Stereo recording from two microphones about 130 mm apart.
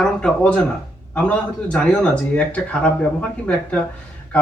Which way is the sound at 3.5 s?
10° left (ahead or behind).